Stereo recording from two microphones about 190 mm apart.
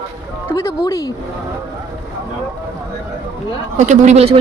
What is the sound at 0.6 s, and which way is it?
Speech, 15° left (ahead or behind).